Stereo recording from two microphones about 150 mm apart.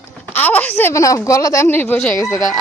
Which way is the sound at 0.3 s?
10° left (ahead or behind).